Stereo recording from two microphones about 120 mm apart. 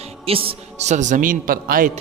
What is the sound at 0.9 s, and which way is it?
Speech, 85° right.